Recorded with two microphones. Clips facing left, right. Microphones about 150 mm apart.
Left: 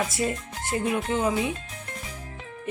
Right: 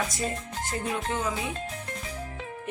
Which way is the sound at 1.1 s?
20° left (ahead or behind).